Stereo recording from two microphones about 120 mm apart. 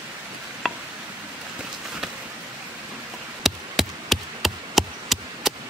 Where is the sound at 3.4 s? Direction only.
Centre (ahead or behind).